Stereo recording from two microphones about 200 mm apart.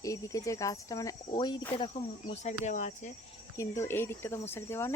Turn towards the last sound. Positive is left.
turn(degrees=10)  # may be behind; listen again after turning